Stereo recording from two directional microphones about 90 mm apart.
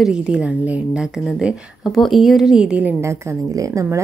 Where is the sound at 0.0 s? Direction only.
10° right (ahead or behind).